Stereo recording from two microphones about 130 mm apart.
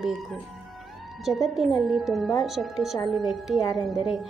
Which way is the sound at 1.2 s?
Centre (ahead or behind).